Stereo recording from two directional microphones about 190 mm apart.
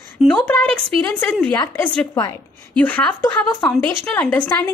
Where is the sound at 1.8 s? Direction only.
5° left (ahead or behind).